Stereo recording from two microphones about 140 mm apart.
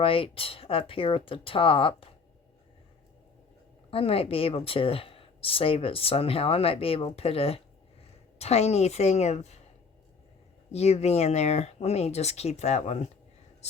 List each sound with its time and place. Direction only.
0.0 s speech: 40° left (ahead or behind)
3.9 s speech: 45° left (ahead or behind)
10.7 s speech: 50° left (ahead or behind)